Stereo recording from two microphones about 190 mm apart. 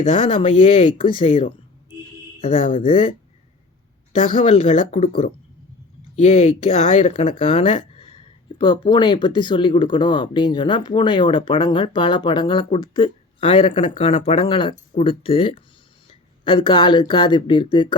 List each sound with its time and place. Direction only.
0.1 s speech: 25° left (ahead or behind)
2.4 s speech: 45° left (ahead or behind)
2.7 s speech: 30° left (ahead or behind)
4.4 s speech: 30° left (ahead or behind)